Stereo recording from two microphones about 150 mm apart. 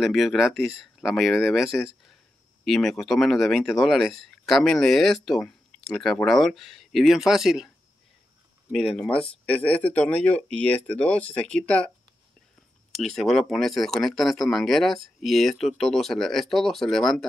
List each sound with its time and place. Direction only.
0.0 s speech: centre (ahead or behind)
8.7 s speech: 5° left (ahead or behind)
12.9 s speech: centre (ahead or behind)